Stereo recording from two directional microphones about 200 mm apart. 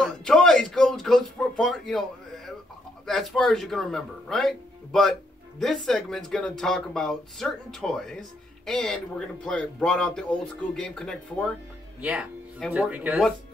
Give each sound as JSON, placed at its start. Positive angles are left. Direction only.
{"t": 0.0, "sound": "a sound", "side_deg": 5}
{"t": 3.1, "sound": "speech", "side_deg": 0}
{"t": 12.0, "sound": "speech", "side_deg": -5}